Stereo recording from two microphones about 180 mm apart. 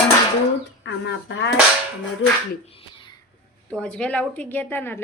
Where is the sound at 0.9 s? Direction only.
90° left.